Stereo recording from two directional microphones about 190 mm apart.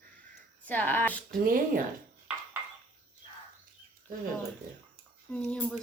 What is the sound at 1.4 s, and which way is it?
Speech, 50° right (ahead or behind).